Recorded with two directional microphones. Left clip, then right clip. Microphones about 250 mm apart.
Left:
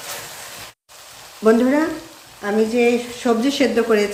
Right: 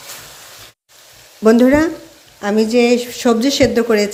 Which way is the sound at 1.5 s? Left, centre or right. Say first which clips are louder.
Right 4 dB; right.